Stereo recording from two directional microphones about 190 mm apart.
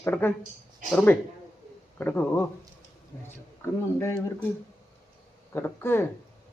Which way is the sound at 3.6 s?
15° left (ahead or behind).